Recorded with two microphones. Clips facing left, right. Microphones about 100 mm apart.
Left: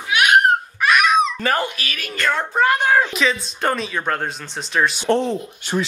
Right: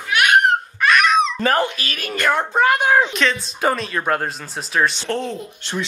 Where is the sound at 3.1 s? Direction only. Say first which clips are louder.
Even; centre (ahead or behind).